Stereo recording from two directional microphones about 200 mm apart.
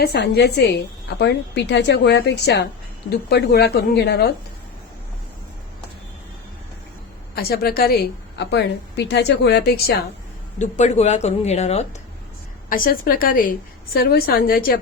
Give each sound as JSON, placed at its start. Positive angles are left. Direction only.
{"t": 0.0, "sound": "a woman's voice", "side_deg": 55}
{"t": 7.3, "sound": "a woman's voice", "side_deg": 50}
{"t": 10.6, "sound": "speech", "side_deg": 35}
{"t": 12.6, "sound": "a woman's voice", "side_deg": 45}